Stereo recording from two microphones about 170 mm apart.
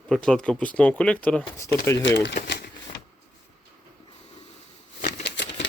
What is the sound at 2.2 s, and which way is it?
Speech, 90° left.